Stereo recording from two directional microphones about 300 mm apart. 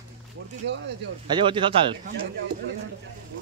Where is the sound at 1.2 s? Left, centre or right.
Centre.